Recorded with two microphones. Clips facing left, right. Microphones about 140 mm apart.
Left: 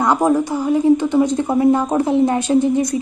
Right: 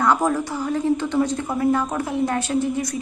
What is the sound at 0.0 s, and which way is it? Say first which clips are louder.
A woman's voice: left 4 dB; 20° left (ahead or behind).